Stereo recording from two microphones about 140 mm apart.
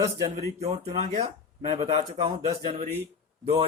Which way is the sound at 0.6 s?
50° right (ahead or behind).